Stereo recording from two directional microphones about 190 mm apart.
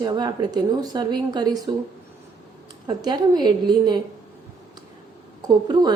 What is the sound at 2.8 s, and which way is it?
A woman's voice, 20° right (ahead or behind).